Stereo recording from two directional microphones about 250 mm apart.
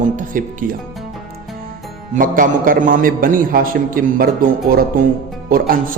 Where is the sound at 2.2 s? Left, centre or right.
Right.